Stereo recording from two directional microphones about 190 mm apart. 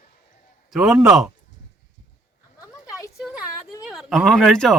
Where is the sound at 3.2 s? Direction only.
5° right (ahead or behind).